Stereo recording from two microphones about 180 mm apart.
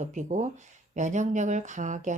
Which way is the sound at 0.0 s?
45° right (ahead or behind).